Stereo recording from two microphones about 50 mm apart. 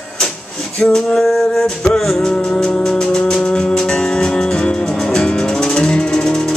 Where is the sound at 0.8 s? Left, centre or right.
Centre.